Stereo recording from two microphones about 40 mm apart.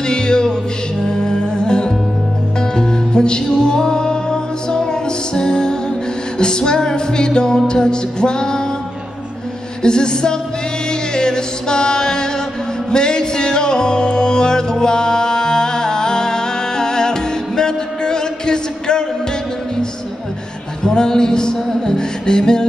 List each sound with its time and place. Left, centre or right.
0.0 s music: centre
9.8 s music: centre
20.8 s music: centre